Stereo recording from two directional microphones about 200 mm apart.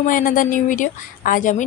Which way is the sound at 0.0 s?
45° left (ahead or behind).